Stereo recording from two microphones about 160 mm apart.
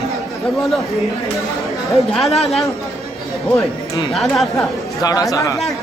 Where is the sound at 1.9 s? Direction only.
Centre (ahead or behind).